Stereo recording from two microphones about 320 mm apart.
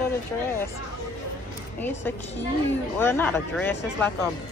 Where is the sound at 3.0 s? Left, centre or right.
Centre.